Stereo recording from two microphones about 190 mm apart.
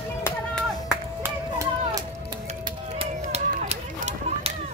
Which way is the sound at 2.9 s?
35° right (ahead or behind).